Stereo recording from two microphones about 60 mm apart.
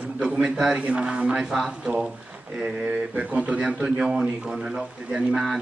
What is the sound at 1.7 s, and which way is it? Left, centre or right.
A man's voice, centre.